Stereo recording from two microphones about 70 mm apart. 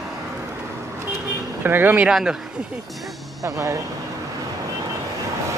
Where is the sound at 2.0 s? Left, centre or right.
Centre.